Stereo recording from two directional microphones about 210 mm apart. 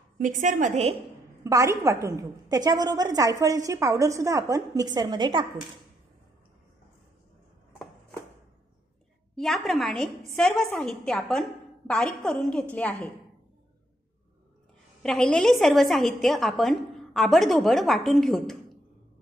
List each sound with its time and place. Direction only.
0.2 s a woman's voice: 40° right (ahead or behind)
1.4 s a woman's voice: 15° right (ahead or behind)
9.3 s a woman's voice: centre (ahead or behind)
15.0 s a woman's voice: 5° left (ahead or behind)